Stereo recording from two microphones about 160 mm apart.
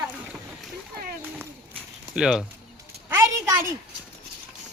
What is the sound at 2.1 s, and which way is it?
Speech, 5° right (ahead or behind).